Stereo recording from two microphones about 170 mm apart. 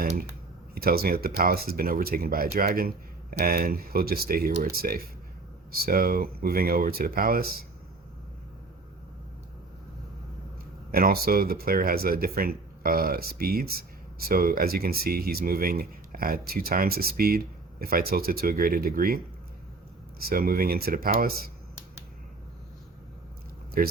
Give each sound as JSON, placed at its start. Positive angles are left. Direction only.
{"t": 0.7, "sound": "speech", "side_deg": -60}
{"t": 10.9, "sound": "speech", "side_deg": -60}
{"t": 23.8, "sound": "speech", "side_deg": -60}